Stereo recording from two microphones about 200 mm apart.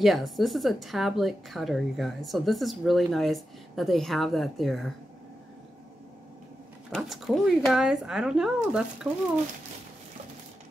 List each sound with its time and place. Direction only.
0.0 s a woman's voice: centre (ahead or behind)
7.0 s a woman's voice: centre (ahead or behind)